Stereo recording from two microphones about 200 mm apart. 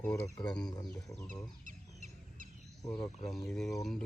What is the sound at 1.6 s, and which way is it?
Chicken, 40° right (ahead or behind).